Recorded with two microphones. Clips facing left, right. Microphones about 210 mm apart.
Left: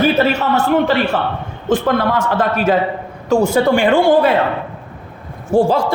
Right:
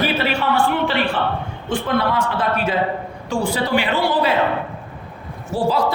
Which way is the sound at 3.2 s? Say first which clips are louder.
Left 9 dB; 45° left (ahead or behind).